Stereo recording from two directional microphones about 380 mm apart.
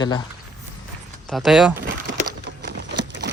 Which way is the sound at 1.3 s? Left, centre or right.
Centre.